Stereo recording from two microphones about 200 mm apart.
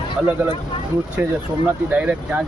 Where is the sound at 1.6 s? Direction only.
5° right (ahead or behind).